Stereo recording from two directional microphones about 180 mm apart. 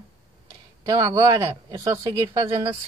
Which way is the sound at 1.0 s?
20° right (ahead or behind).